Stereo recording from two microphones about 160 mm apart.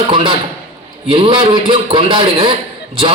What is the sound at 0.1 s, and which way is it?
A man's voice, 30° right (ahead or behind).